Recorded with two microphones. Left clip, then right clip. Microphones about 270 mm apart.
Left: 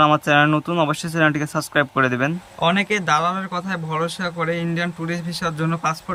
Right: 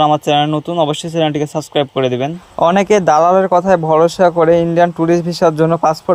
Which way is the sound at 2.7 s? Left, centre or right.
Centre.